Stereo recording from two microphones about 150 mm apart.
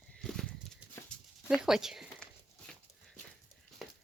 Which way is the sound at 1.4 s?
5° right (ahead or behind).